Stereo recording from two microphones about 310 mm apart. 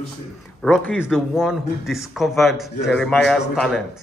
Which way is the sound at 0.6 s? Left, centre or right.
Centre.